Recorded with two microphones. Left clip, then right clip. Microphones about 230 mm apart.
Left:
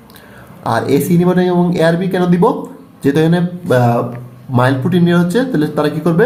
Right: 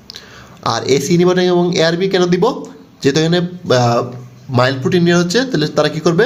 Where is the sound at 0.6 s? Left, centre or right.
Right.